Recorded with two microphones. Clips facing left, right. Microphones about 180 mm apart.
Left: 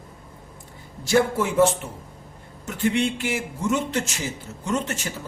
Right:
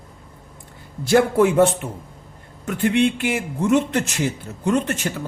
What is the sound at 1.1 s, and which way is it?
A man's voice, 60° right (ahead or behind).